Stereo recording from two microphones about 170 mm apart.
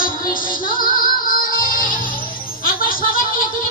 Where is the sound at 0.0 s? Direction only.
55° left (ahead or behind).